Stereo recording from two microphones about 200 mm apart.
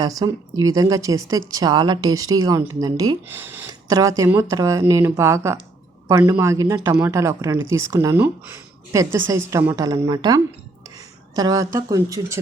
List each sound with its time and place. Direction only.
0.0 s a woman's voice: 20° right (ahead or behind)